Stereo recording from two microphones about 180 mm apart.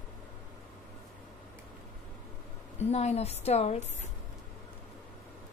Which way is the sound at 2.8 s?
35° left (ahead or behind).